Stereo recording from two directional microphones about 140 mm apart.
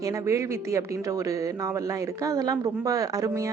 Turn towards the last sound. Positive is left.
turn(degrees=-25)  # may be behind; listen again after turning